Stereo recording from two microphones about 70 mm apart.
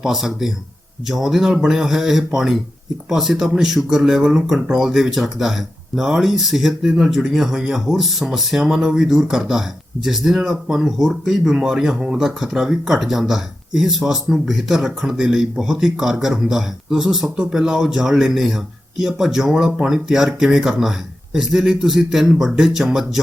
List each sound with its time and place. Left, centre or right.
0.0 s speech: centre